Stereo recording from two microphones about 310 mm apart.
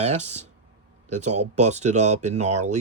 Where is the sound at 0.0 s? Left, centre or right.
Right.